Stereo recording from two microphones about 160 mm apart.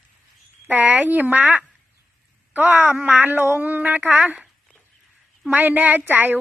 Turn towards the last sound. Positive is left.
turn(degrees=-10)  # may be behind; listen again after turning